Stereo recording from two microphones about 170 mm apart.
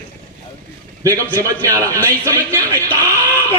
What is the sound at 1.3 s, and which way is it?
Speech, 20° right (ahead or behind).